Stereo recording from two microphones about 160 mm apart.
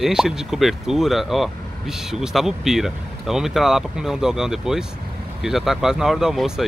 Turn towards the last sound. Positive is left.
turn(degrees=0)  # may be behind; listen again after turning